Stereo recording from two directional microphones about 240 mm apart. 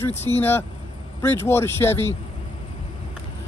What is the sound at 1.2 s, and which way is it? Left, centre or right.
Speech, centre.